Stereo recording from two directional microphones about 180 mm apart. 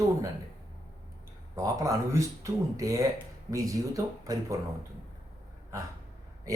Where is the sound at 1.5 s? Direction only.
15° right (ahead or behind).